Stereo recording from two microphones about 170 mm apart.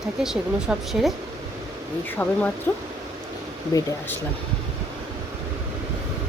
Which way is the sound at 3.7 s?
20° left (ahead or behind).